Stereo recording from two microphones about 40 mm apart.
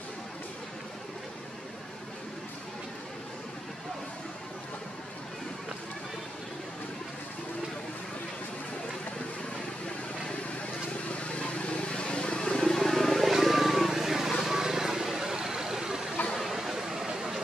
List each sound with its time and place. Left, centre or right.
11.1 s vehicle: left
12.4 s wild animals: centre
13.3 s vehicle: centre
16.3 s a sound: centre